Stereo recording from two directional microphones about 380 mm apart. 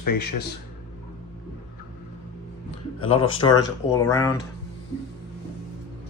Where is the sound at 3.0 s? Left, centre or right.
Centre.